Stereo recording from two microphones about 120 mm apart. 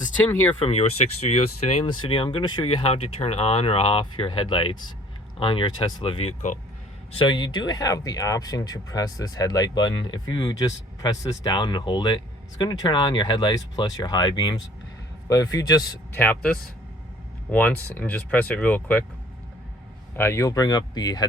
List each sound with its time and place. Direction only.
0.2 s speech: 15° left (ahead or behind)
0.6 s speech: 60° left (ahead or behind)
1.9 s speech: 45° left (ahead or behind)
6.1 s speech: 60° left (ahead or behind); by 6.6 s 75° left (ahead or behind)
7.1 s speech: 45° left (ahead or behind)
16.1 s speech: 15° left (ahead or behind)
20.1 s speech: 20° left (ahead or behind)